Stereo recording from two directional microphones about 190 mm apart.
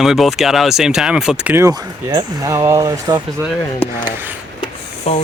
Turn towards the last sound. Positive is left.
turn(degrees=35)  # may be behind; listen again after turning